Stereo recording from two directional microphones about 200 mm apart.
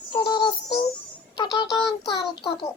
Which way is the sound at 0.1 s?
25° left (ahead or behind).